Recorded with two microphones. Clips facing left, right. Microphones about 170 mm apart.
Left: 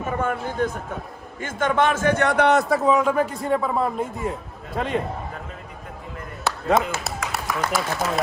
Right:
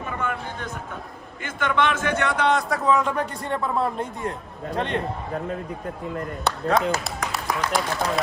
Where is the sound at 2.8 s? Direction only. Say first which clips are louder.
Left 3 dB; centre (ahead or behind).